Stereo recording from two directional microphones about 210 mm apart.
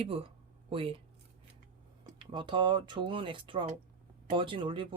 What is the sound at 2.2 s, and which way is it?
Speech, 25° right (ahead or behind).